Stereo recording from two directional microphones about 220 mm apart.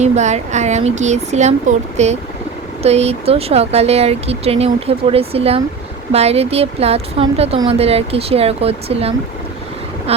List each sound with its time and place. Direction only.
0.0 s a woman's voice: 30° right (ahead or behind)